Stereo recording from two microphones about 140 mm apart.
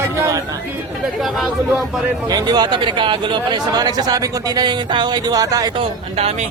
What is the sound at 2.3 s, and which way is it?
Speech, 30° right (ahead or behind).